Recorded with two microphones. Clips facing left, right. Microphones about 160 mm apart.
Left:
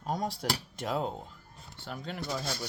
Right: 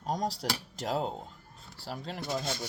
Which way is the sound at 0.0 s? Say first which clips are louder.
Right 1 dB; 40° right (ahead or behind).